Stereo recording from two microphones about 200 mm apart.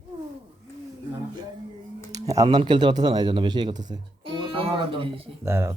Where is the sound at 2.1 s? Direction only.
15° right (ahead or behind).